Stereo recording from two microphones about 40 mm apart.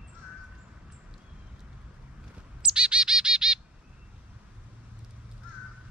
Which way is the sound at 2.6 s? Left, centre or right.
Right.